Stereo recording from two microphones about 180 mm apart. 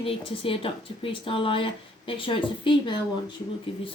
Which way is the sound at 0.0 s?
30° left (ahead or behind).